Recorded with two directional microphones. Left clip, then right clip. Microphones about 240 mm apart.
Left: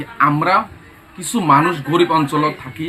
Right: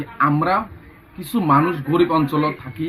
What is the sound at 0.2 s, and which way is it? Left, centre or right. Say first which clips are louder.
Speech: left 4 dB; centre.